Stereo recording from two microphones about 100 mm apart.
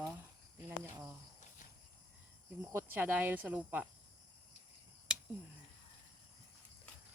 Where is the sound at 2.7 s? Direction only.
20° right (ahead or behind).